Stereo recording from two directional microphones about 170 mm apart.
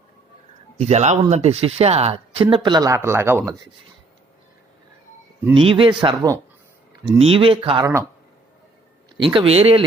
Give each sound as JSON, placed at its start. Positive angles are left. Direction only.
{"t": 0.8, "sound": "speech", "side_deg": -40}
{"t": 5.5, "sound": "speech", "side_deg": -30}
{"t": 9.1, "sound": "speech", "side_deg": -30}